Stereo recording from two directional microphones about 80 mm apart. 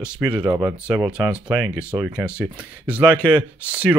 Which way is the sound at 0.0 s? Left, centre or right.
Centre.